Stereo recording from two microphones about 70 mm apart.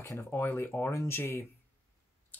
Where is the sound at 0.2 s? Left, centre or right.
Left.